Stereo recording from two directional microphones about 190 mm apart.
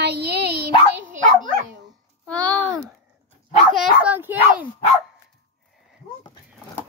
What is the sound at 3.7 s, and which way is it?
Speech, 5° right (ahead or behind).